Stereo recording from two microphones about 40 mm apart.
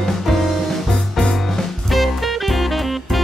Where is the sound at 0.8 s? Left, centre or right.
Centre.